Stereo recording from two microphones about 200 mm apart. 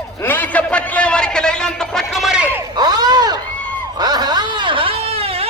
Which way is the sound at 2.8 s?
20° right (ahead or behind).